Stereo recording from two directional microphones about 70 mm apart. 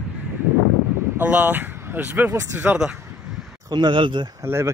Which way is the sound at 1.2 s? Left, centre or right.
Right.